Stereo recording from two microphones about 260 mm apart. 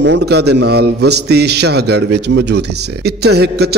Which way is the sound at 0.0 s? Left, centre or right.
Right.